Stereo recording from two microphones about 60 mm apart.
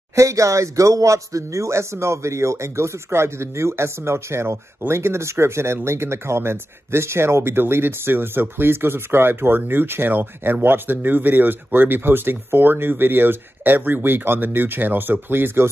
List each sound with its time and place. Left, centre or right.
0.1 s speech: right